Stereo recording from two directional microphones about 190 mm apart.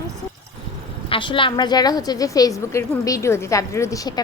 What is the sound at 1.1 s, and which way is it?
A woman's voice, 25° left (ahead or behind).